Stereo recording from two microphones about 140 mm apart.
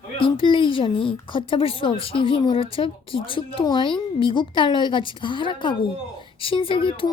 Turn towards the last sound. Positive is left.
turn(degrees=40)  # may be behind; listen again after turning